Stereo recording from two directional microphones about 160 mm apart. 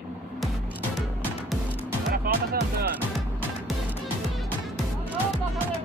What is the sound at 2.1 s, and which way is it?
Music, 70° right (ahead or behind).